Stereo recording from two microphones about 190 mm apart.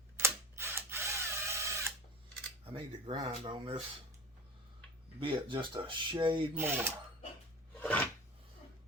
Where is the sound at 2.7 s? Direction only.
25° right (ahead or behind).